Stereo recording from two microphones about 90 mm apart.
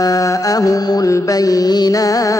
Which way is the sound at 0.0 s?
40° left (ahead or behind).